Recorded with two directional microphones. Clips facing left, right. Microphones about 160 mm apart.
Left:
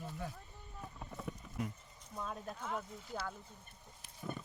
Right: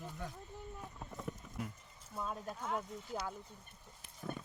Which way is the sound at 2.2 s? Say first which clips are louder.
Right 2 dB; 5° right (ahead or behind).